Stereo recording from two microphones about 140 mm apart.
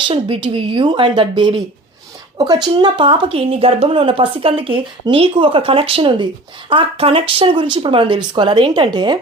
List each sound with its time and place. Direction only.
0.1 s speech: 40° right (ahead or behind)